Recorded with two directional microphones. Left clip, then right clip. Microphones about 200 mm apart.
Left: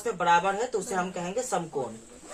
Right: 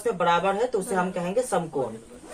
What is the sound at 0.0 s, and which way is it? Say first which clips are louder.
Speech: right 1 dB; 15° left (ahead or behind).